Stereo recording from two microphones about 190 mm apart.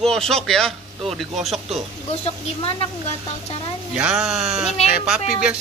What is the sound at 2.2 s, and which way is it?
Speech, 30° left (ahead or behind).